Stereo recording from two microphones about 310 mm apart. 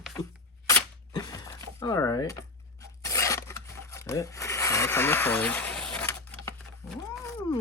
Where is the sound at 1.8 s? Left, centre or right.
Centre.